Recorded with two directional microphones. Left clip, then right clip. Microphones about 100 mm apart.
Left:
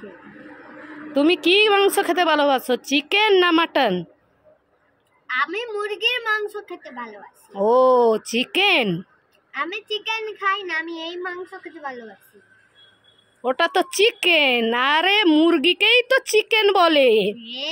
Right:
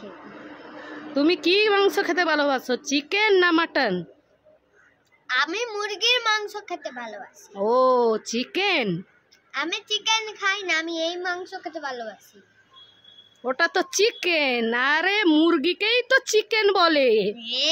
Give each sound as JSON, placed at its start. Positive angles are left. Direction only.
{"t": 1.1, "sound": "a woman's voice", "side_deg": 20}
{"t": 5.2, "sound": "a child's voice", "side_deg": -30}
{"t": 7.6, "sound": "a woman's voice", "side_deg": 15}
{"t": 9.5, "sound": "a child's voice", "side_deg": -25}
{"t": 13.4, "sound": "a woman's voice", "side_deg": 20}
{"t": 15.2, "sound": "a woman's voice", "side_deg": 5}
{"t": 15.5, "sound": "a woman's voice", "side_deg": 20}
{"t": 17.4, "sound": "a child's voice", "side_deg": -30}